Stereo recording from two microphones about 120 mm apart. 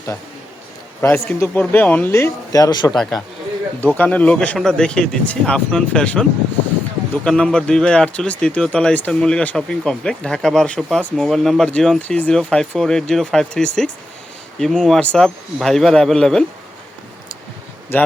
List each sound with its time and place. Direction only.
1.0 s speech: 20° left (ahead or behind)
2.1 s speech: 25° left (ahead or behind)
2.9 s speech: centre (ahead or behind)
3.9 s speech: 15° left (ahead or behind)
17.9 s speech: 20° left (ahead or behind)